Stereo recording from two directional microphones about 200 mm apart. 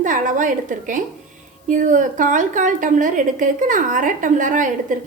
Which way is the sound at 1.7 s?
40° right (ahead or behind).